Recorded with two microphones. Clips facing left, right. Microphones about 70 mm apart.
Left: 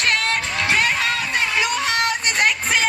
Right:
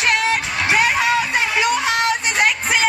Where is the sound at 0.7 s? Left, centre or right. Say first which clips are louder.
Right 5 dB; centre.